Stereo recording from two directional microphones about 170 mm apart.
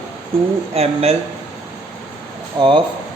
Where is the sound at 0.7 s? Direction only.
35° right (ahead or behind).